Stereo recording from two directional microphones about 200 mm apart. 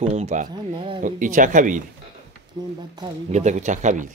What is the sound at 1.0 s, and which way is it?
Speech, 40° right (ahead or behind).